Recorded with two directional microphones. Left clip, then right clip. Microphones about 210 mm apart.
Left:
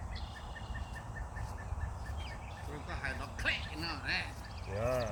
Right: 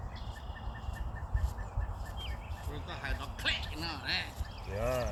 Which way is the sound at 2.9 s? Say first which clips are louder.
Even; 15° left (ahead or behind).